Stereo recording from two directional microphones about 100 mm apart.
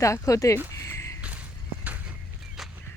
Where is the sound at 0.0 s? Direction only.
30° left (ahead or behind).